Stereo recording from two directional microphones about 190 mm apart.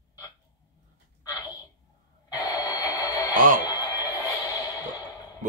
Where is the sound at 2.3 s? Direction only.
20° left (ahead or behind).